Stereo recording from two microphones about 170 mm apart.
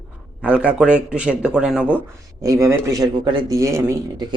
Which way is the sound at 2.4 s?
20° right (ahead or behind).